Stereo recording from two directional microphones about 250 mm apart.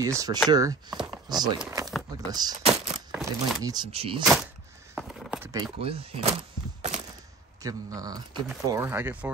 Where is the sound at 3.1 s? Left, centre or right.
Centre.